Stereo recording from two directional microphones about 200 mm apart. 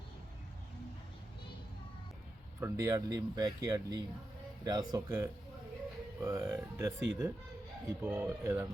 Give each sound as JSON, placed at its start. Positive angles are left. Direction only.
{"t": 2.6, "sound": "speech", "side_deg": -15}